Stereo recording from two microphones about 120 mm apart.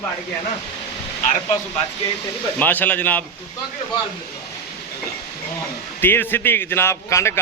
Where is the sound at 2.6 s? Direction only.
15° left (ahead or behind).